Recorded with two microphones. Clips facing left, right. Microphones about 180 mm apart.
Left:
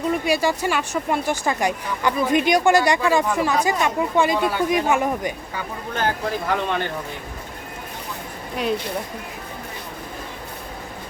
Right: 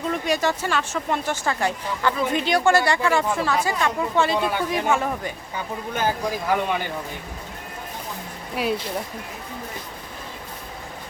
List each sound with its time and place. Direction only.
0.1 s speech: 10° left (ahead or behind)
5.9 s speech: 10° right (ahead or behind)